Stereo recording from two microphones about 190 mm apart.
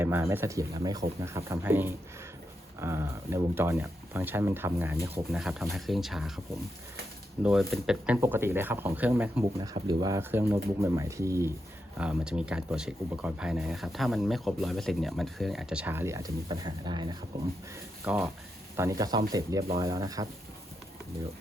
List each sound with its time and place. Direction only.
0.0 s speech: 15° right (ahead or behind)
7.4 s speech: centre (ahead or behind)
9.7 s speech: 20° right (ahead or behind)
18.0 s speech: 10° right (ahead or behind)